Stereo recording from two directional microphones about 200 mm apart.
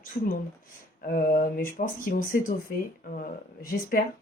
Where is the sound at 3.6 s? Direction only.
45° left (ahead or behind).